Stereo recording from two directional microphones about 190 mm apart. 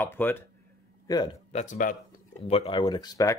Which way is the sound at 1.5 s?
40° left (ahead or behind).